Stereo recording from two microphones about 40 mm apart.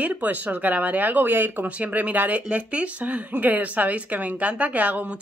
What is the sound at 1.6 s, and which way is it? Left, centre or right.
Speech, right.